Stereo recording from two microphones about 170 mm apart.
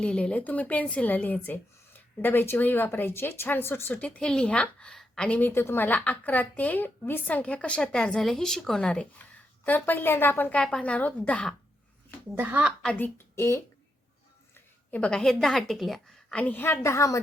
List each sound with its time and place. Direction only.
0.0 s a woman's voice: 5° left (ahead or behind)
12.3 s a woman's voice: 10° right (ahead or behind)
12.8 s a woman's voice: 5° left (ahead or behind)
13.3 s a woman's voice: 15° left (ahead or behind)